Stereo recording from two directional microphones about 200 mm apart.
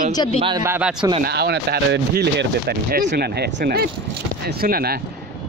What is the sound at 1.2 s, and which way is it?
Speech, 55° right (ahead or behind).